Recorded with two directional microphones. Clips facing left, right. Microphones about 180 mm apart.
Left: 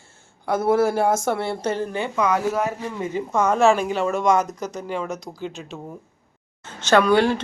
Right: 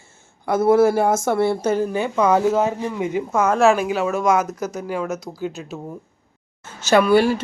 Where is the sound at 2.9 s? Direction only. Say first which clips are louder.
Right 3 dB; 10° right (ahead or behind).